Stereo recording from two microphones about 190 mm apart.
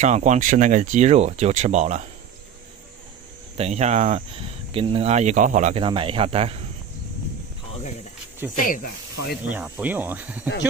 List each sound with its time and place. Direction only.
0.0 s speech: 40° right (ahead or behind)
3.5 s speech: 35° right (ahead or behind)
5.8 s speech: 30° right (ahead or behind)
8.5 s snake: 45° left (ahead or behind)
9.4 s speech: 10° right (ahead or behind)